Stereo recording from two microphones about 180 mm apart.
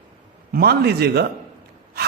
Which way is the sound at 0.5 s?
60° right (ahead or behind).